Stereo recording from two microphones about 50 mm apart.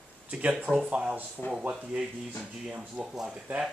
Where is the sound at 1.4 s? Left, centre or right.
Left.